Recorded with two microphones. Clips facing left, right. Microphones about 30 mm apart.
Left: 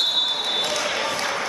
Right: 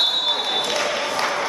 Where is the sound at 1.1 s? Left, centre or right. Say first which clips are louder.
Right 3 dB; centre.